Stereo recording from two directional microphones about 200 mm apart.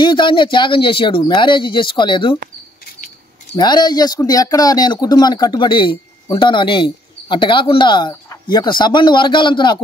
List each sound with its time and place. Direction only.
0.0 s speech: 25° left (ahead or behind)
3.5 s speech: 20° left (ahead or behind)